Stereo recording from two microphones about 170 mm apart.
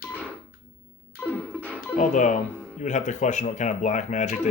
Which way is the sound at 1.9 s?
45° left (ahead or behind).